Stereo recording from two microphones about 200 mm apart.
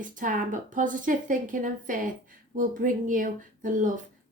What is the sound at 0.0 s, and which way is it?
A woman's voice, 40° right (ahead or behind).